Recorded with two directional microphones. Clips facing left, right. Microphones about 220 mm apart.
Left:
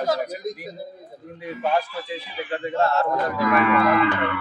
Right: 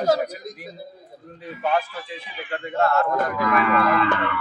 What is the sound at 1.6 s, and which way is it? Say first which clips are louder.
Speech: even; 20° left (ahead or behind).